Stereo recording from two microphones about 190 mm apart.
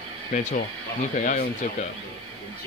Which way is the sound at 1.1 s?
45° left (ahead or behind).